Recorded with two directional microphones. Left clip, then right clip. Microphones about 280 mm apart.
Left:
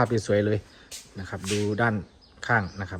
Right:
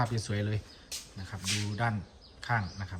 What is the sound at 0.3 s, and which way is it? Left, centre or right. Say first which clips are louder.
Speech: left 15 dB; left.